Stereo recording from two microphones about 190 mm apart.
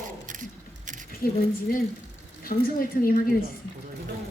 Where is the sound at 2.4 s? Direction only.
50° left (ahead or behind).